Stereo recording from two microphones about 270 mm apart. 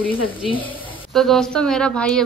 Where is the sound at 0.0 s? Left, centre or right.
Centre.